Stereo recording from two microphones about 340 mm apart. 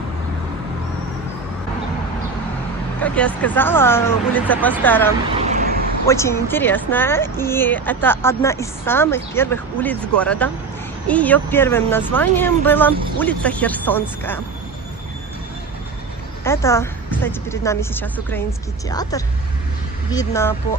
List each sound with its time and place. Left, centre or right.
3.0 s speech: centre
5.3 s vehicle: centre
6.1 s a woman's voice: centre
16.4 s a woman's voice: centre